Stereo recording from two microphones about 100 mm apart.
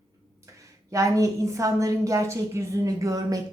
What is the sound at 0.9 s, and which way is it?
A woman's voice, 35° right (ahead or behind).